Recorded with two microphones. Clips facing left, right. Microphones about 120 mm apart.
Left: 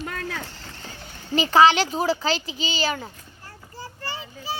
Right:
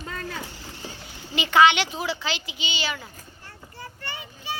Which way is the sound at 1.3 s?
35° left (ahead or behind).